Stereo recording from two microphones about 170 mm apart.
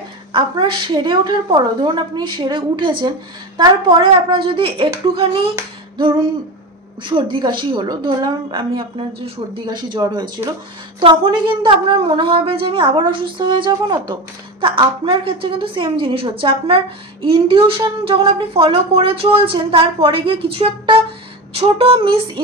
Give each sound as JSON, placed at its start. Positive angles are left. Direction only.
{"t": 0.3, "sound": "a woman's voice", "side_deg": -30}
{"t": 5.6, "sound": "a sound", "side_deg": -30}
{"t": 7.1, "sound": "a woman's voice", "side_deg": -30}